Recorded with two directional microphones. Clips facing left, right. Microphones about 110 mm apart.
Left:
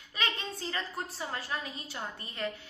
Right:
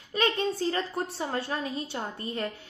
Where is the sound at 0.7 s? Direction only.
30° right (ahead or behind).